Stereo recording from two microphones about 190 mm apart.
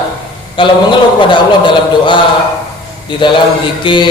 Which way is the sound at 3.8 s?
25° left (ahead or behind).